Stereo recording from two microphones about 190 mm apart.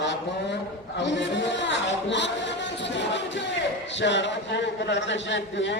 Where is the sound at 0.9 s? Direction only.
65° left (ahead or behind).